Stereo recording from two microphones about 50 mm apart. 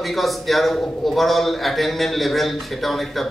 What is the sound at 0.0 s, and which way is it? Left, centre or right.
A man's voice, centre.